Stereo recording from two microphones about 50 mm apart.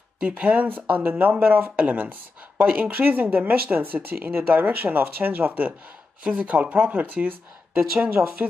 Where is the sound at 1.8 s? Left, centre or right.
Right.